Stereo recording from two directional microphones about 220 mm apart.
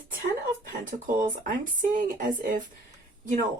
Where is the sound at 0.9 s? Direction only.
35° right (ahead or behind).